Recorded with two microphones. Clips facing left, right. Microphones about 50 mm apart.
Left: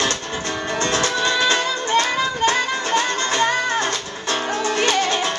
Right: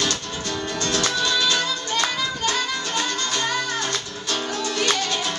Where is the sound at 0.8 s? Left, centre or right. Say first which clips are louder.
Left 3 dB; left.